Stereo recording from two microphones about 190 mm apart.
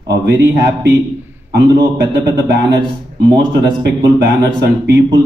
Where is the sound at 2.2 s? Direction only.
65° right (ahead or behind).